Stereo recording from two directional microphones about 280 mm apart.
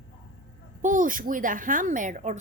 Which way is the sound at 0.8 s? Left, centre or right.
Right.